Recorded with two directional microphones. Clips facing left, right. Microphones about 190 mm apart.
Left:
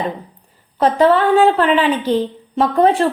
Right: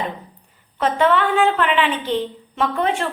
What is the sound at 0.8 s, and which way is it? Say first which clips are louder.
A woman's voice: left 5 dB; 35° left (ahead or behind).